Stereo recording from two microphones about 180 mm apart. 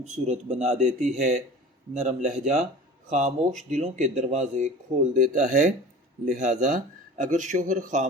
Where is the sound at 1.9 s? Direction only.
40° right (ahead or behind).